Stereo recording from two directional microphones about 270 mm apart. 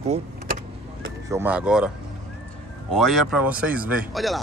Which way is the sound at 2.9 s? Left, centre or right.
Centre.